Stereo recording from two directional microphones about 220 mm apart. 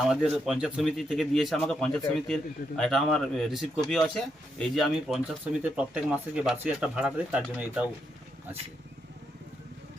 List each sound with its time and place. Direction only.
0.1 s speech: centre (ahead or behind)